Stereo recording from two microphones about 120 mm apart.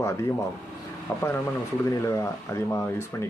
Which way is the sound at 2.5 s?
20° left (ahead or behind).